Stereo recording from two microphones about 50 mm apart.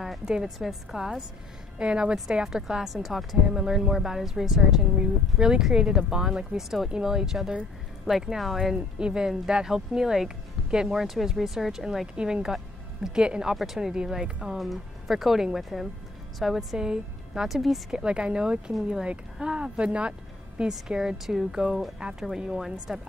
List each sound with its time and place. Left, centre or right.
0.2 s speech: centre
2.4 s a woman's voice: centre
8.7 s speech: centre
12.5 s music: centre
13.2 s a woman's voice: centre
16.5 s a woman's voice: centre